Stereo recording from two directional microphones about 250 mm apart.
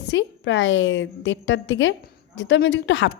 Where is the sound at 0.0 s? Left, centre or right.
Left.